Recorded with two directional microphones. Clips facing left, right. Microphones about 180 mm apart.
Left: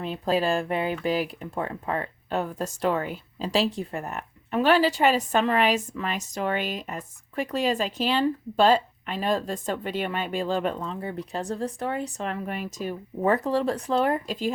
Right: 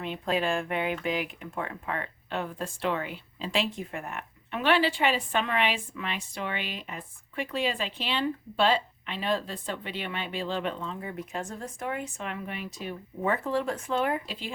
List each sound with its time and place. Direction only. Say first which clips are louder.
0.0 s speech: left 4 dB; 35° left (ahead or behind)